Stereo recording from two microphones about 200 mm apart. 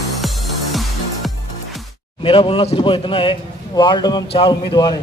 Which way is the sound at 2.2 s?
25° left (ahead or behind).